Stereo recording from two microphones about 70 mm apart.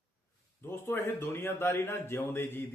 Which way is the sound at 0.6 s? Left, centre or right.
Left.